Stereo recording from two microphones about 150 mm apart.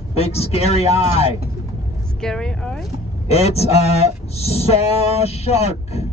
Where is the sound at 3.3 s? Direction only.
45° left (ahead or behind).